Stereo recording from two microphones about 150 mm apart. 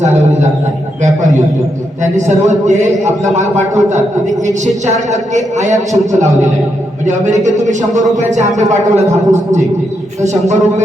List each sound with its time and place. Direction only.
0.0 s a sound: 50° right (ahead or behind)
2.1 s a man's voice: 50° right (ahead or behind)
5.1 s a man's voice: 50° right (ahead or behind)
7.4 s a man's voice: 55° right (ahead or behind)